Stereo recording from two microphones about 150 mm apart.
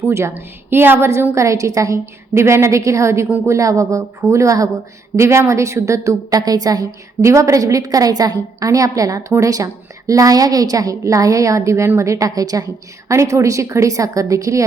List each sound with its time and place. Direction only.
0.1 s a woman's voice: 15° right (ahead or behind)